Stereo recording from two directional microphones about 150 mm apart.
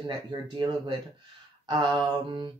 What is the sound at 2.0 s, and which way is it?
Mantra, 30° right (ahead or behind).